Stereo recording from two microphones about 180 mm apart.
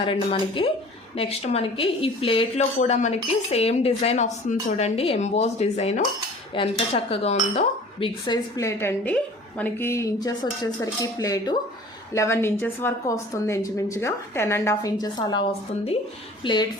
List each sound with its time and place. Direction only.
0.0 s a woman's voice: 30° left (ahead or behind)